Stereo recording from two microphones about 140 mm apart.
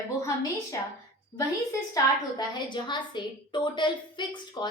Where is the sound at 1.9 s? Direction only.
30° left (ahead or behind).